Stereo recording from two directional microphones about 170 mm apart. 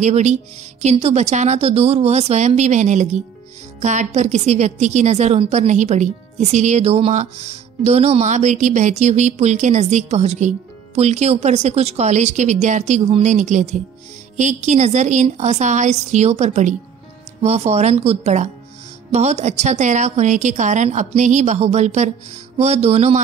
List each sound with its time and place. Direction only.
0.0 s a woman's voice: 45° right (ahead or behind)